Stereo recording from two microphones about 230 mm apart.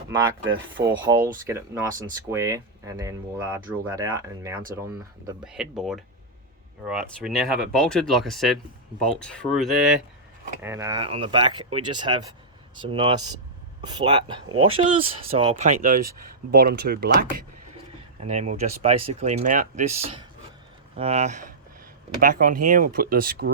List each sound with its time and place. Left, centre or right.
0.1 s speech: right
0.9 s speech: centre
10.6 s speech: centre; by 17.2 s right
18.2 s speech: right
20.9 s speech: right